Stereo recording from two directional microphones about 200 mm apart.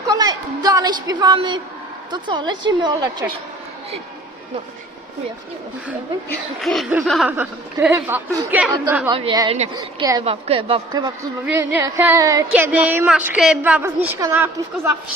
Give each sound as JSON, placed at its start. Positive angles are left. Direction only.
{"t": 0.1, "sound": "a woman's voice", "side_deg": -20}
{"t": 6.6, "sound": "speech", "side_deg": 0}
{"t": 9.0, "sound": "a woman's voice", "side_deg": -25}
{"t": 11.4, "sound": "speech", "side_deg": -10}